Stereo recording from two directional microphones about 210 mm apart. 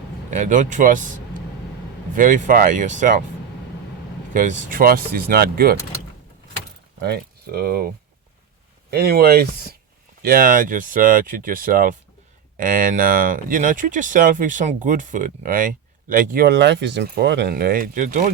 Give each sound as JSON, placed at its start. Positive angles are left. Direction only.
{"t": 0.3, "sound": "speech", "side_deg": -35}
{"t": 2.1, "sound": "speech", "side_deg": -40}
{"t": 4.4, "sound": "speech", "side_deg": -40}
{"t": 7.0, "sound": "speech", "side_deg": -50}